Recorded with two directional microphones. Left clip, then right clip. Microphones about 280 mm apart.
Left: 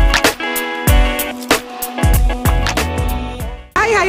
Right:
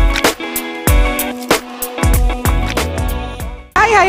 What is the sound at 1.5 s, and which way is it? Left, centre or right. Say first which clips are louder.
Music: even; centre.